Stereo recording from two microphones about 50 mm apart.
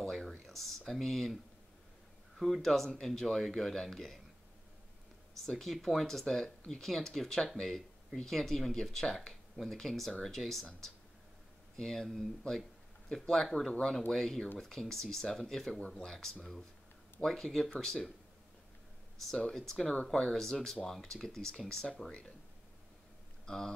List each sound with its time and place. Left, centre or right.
0.0 s a sound: centre
0.5 s speech: centre
2.3 s speech: centre
5.4 s speech: centre
11.7 s speech: centre
13.7 s speech: centre
19.3 s speech: centre
23.4 s speech: centre